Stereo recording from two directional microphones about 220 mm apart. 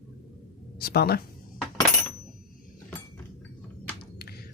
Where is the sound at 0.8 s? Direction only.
45° left (ahead or behind).